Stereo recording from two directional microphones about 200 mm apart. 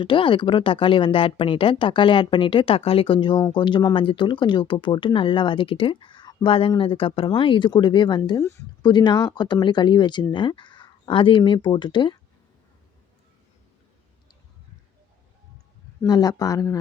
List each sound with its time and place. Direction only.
0.0 s speech: 25° left (ahead or behind)
16.0 s speech: 20° left (ahead or behind)